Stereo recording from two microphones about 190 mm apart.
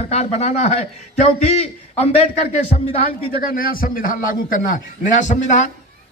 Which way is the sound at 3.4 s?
50° left (ahead or behind).